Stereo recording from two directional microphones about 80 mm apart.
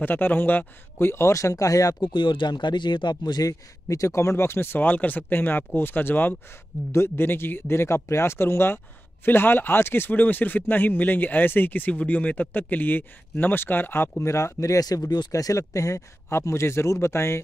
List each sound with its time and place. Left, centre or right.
0.0 s speech: left
2.0 s speech: left